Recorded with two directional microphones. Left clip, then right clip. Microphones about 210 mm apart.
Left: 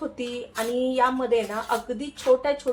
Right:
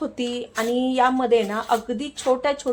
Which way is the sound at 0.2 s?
50° right (ahead or behind).